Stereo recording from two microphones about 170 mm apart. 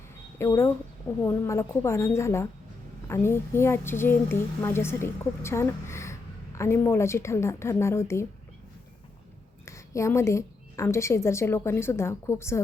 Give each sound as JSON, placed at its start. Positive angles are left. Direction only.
{"t": 0.3, "sound": "a woman's voice", "side_deg": 15}
{"t": 9.6, "sound": "a woman's voice", "side_deg": 15}